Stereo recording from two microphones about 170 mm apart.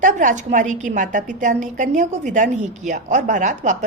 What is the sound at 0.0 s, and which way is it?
A woman's voice, 50° right (ahead or behind).